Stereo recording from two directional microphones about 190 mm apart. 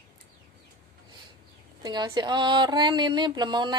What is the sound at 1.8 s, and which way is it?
Speech, 20° right (ahead or behind).